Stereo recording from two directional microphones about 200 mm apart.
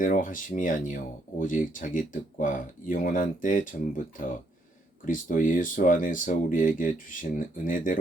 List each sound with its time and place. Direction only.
0.0 s speech: 40° left (ahead or behind)